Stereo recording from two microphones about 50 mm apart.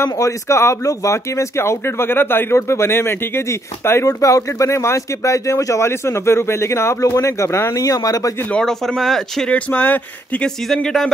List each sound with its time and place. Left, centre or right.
0.0 s speech: left
2.5 s speech: left
8.5 s speech: centre
9.5 s speech: left
10.8 s speech: centre